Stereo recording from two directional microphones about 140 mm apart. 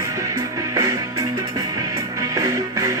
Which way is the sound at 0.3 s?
25° right (ahead or behind).